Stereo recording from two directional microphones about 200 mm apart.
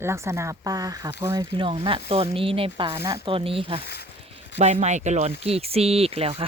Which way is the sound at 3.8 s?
55° left (ahead or behind).